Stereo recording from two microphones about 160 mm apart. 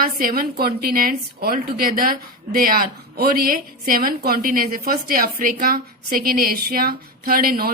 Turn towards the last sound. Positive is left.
turn(degrees=-70)  # may be behind; listen again after turning